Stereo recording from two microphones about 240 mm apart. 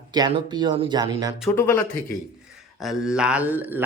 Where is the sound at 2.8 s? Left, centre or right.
Centre.